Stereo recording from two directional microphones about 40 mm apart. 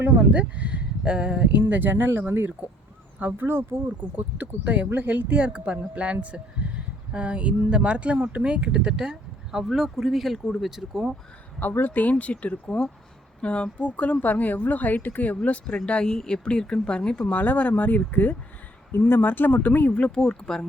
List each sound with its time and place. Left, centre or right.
0.0 s speech: right
1.5 s speech: right
4.0 s speech: right; by 11.1 s centre
11.9 s speech: left
12.1 s speech: left
15.4 s speech: left
17.3 s speech: left
18.9 s speech: left
20.0 s speech: left